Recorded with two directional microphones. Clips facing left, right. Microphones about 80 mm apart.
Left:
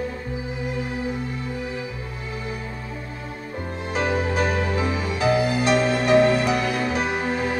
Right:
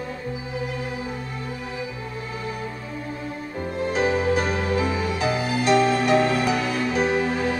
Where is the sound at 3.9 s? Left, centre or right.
Left.